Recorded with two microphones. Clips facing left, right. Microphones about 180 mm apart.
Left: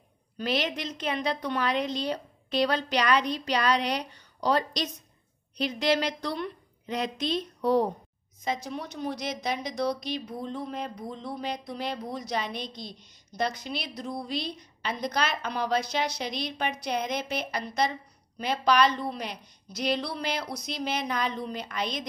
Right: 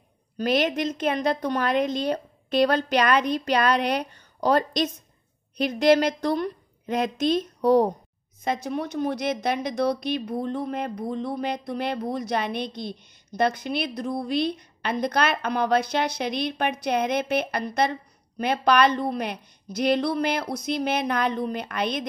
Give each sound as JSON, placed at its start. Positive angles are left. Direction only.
{"t": 0.4, "sound": "a woman's voice", "side_deg": -50}